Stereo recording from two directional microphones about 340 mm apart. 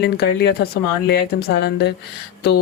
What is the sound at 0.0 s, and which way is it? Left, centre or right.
Speech, left.